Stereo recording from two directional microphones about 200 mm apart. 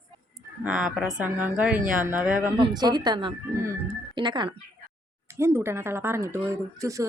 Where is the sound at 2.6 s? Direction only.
25° right (ahead or behind).